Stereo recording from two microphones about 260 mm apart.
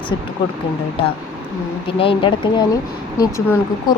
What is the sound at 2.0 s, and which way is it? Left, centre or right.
Speech, centre.